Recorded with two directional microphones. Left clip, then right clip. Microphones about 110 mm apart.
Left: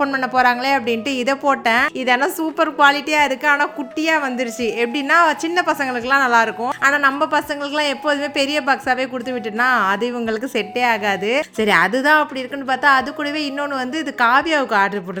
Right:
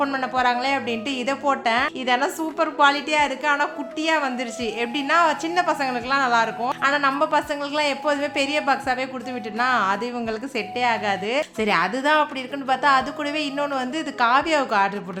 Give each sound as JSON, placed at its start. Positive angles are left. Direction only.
{"t": 0.0, "sound": "a woman's voice", "side_deg": 40}
{"t": 0.3, "sound": "a woman's voice", "side_deg": 55}
{"t": 6.6, "sound": "a woman's voice", "side_deg": 40}